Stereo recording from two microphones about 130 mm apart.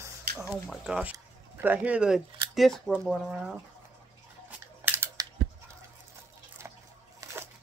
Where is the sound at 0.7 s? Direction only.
5° right (ahead or behind).